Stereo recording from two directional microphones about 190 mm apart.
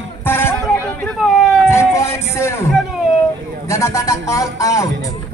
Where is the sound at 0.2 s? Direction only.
10° left (ahead or behind).